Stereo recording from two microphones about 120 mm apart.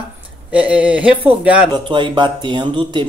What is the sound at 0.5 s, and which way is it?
Speech, 10° right (ahead or behind).